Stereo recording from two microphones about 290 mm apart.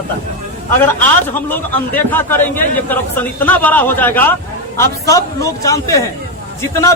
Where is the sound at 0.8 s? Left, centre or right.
Centre.